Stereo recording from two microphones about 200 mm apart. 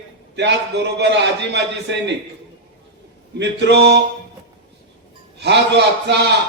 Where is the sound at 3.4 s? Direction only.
55° right (ahead or behind).